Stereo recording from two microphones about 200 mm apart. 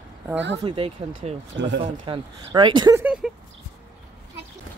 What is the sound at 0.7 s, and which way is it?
Speech, 30° right (ahead or behind).